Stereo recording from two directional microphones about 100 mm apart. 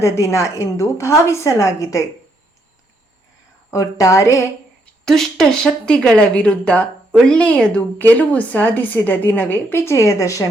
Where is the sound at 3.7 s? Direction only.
35° left (ahead or behind).